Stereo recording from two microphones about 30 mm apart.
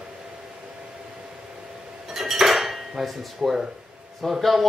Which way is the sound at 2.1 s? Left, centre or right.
Centre.